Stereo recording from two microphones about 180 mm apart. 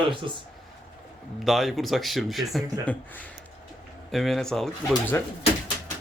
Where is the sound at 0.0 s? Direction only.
30° right (ahead or behind).